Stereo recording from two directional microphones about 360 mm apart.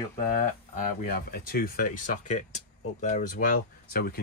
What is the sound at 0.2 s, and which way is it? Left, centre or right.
Speech, left.